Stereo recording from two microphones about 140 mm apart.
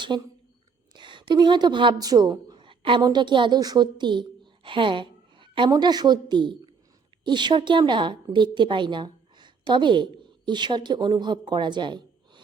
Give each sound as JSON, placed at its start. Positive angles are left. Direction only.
{"t": 0.1, "sound": "a woman's voice", "side_deg": -30}